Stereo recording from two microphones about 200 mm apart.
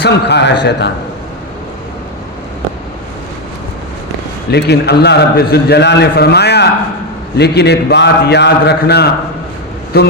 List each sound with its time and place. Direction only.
0.0 s a man's voice: 55° left (ahead or behind)
4.5 s a man's voice: 55° left (ahead or behind)